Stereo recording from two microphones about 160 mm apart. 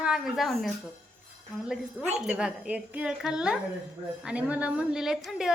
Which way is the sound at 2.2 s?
5° right (ahead or behind).